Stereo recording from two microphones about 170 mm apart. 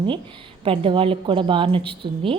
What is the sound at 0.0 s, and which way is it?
A woman's voice, 30° right (ahead or behind).